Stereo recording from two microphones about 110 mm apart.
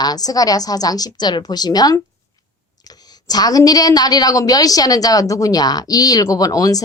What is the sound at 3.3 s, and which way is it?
A woman's voice, 35° left (ahead or behind).